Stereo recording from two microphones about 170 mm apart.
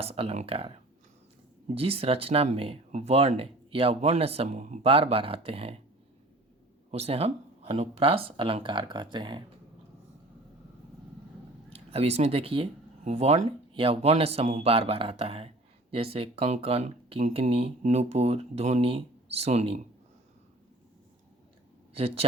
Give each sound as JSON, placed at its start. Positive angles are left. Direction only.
{"t": 0.0, "sound": "speech", "side_deg": -35}
{"t": 1.7, "sound": "speech", "side_deg": -35}
{"t": 6.9, "sound": "speech", "side_deg": -35}
{"t": 11.7, "sound": "speech", "side_deg": -35}
{"t": 21.9, "sound": "speech", "side_deg": -35}